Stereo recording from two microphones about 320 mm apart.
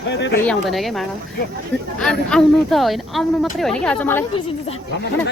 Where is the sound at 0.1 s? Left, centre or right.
Left.